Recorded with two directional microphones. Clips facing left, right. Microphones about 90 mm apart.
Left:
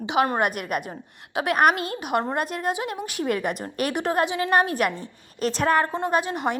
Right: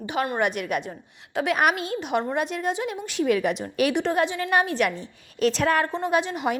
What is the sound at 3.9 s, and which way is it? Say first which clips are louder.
Speech: right 1 dB; 5° left (ahead or behind).